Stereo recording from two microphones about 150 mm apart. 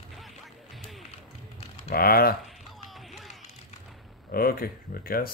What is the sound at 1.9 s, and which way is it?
Typing, 85° left.